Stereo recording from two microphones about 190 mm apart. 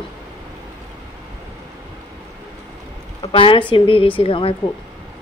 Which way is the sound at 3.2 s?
30° left (ahead or behind).